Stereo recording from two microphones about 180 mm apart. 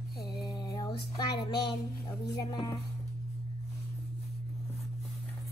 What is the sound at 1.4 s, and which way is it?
Music, 25° left (ahead or behind).